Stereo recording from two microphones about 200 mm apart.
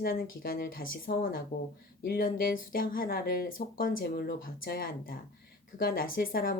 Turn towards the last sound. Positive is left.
turn(degrees=45)  # may be behind; listen again after turning